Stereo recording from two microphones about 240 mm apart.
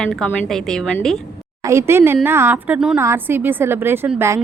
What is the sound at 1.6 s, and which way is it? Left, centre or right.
A woman's voice, centre.